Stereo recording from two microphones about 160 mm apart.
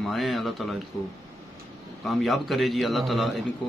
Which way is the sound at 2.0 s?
Centre (ahead or behind).